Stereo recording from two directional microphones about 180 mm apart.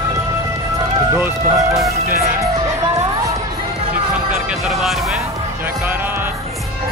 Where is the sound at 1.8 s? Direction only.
15° right (ahead or behind).